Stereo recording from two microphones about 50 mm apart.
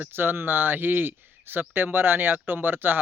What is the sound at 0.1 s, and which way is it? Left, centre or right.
Speech, right.